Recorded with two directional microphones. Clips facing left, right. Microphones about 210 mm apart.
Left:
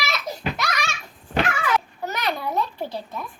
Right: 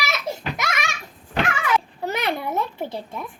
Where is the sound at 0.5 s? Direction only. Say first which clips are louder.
Even; 20° right (ahead or behind).